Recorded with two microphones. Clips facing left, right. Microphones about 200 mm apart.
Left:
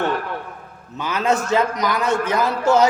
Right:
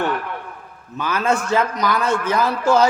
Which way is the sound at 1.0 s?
20° left (ahead or behind).